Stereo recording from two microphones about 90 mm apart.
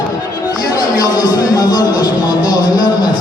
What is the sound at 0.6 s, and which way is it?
Speech, 50° left (ahead or behind).